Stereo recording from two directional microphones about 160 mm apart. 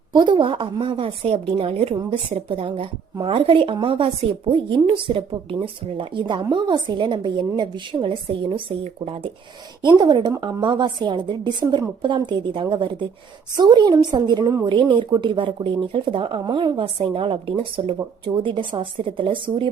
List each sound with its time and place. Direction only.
0.1 s speech: 30° right (ahead or behind)
9.8 s a woman's voice: 25° right (ahead or behind)